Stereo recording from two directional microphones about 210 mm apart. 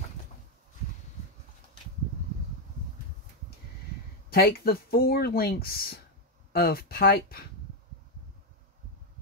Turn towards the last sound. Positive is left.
turn(degrees=45)  # may be behind; listen again after turning